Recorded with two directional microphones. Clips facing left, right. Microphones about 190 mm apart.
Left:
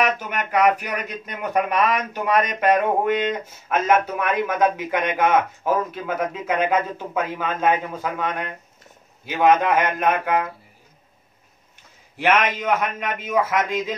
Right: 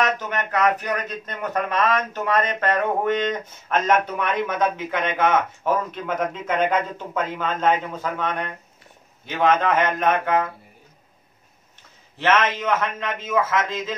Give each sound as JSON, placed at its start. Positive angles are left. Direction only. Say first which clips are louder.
{"t": 0.0, "sound": "speech", "louder": "left 1 dB", "side_deg": 10}
{"t": 12.2, "sound": "speech", "louder": "even", "side_deg": 10}